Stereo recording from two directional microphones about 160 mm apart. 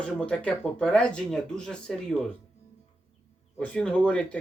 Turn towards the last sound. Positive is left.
turn(degrees=5)  # may be behind; listen again after turning